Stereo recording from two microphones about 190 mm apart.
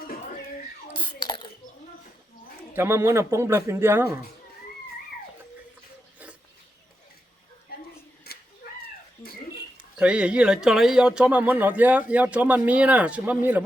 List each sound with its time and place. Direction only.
0.9 s whispering: 25° left (ahead or behind)
2.7 s speech: 15° right (ahead or behind)
7.7 s a sound: 55° left (ahead or behind)
8.3 s cat: 55° left (ahead or behind)
9.7 s speech: 5° right (ahead or behind)